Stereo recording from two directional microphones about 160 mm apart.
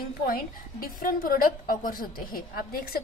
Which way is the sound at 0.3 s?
65° left (ahead or behind).